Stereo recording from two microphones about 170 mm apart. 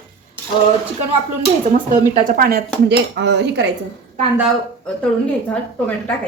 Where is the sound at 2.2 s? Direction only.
55° right (ahead or behind).